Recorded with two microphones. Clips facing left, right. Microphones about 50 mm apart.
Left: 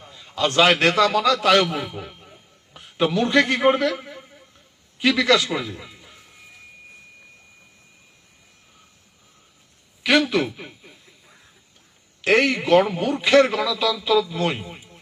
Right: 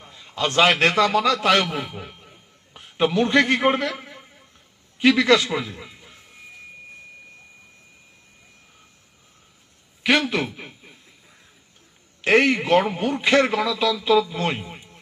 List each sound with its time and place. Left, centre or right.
0.0 s a man's voice: centre
1.8 s a sound: centre
2.7 s a man's voice: right
3.9 s a sound: centre
4.9 s a man's voice: right
5.5 s a man's voice: centre
10.0 s a man's voice: right
10.4 s a man's voice: centre
10.7 s a sound: centre
12.2 s a man's voice: right